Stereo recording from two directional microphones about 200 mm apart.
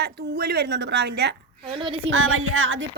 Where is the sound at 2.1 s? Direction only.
90° right.